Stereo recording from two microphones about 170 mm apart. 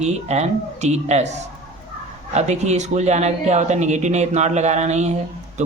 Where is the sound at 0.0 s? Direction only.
40° right (ahead or behind).